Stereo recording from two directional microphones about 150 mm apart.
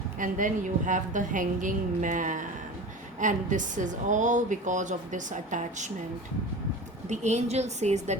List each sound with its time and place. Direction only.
0.2 s a woman's voice: 60° right (ahead or behind)
7.1 s a woman's voice: 50° right (ahead or behind)